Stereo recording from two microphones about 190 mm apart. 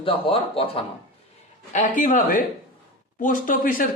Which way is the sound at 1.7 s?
40° left (ahead or behind).